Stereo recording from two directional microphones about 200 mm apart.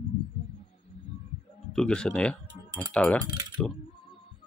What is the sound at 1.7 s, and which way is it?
Speech, 5° left (ahead or behind).